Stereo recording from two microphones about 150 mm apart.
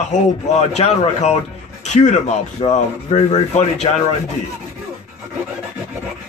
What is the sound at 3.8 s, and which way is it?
Rub, 35° left (ahead or behind).